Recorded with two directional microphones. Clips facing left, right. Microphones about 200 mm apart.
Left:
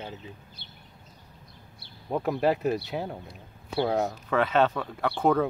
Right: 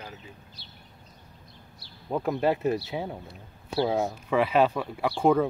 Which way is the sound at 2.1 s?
Centre (ahead or behind).